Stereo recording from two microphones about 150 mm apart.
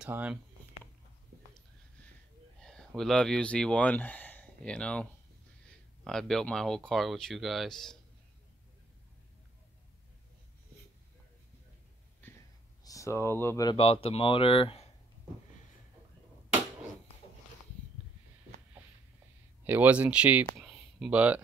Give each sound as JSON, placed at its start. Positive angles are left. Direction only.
{"t": 0.0, "sound": "speech", "side_deg": -10}
{"t": 2.6, "sound": "a sound", "side_deg": 5}
{"t": 3.0, "sound": "speech", "side_deg": 5}
{"t": 6.0, "sound": "speech", "side_deg": 5}
{"t": 12.2, "sound": "a sound", "side_deg": 10}
{"t": 12.8, "sound": "speech", "side_deg": 20}
{"t": 13.7, "sound": "speech", "side_deg": 40}
{"t": 19.6, "sound": "speech", "side_deg": -15}
{"t": 20.5, "sound": "a sound", "side_deg": 0}